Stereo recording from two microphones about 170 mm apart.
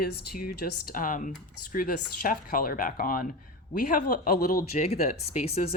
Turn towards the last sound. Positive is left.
turn(degrees=35)  # may be behind; listen again after turning